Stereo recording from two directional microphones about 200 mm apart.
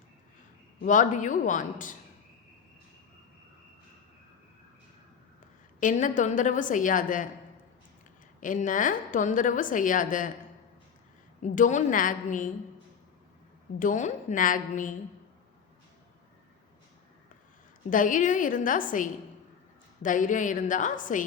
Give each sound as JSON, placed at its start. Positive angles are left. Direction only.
{"t": 0.8, "sound": "a woman's voice", "side_deg": 40}
{"t": 5.8, "sound": "a woman's voice", "side_deg": 40}
{"t": 8.4, "sound": "a woman's voice", "side_deg": 40}
{"t": 11.4, "sound": "a woman's voice", "side_deg": 40}
{"t": 13.7, "sound": "a woman's voice", "side_deg": 40}
{"t": 17.9, "sound": "a woman's voice", "side_deg": 40}